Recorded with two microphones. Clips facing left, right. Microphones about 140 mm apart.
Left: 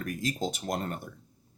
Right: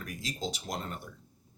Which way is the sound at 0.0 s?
50° left (ahead or behind).